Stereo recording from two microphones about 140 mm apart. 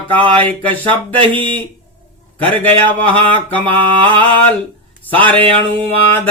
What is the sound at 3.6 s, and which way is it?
Mantra, 40° right (ahead or behind).